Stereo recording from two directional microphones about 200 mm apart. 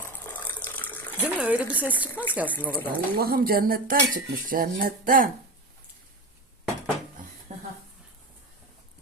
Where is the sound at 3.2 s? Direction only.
50° right (ahead or behind).